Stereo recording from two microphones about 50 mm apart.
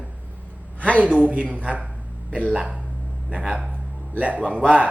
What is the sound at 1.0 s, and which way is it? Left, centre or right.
A woman's voice, right.